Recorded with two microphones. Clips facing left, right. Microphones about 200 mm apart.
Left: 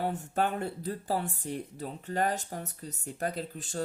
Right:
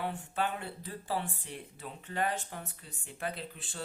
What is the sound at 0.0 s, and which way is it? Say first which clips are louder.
Speech: left 4 dB; 45° left (ahead or behind).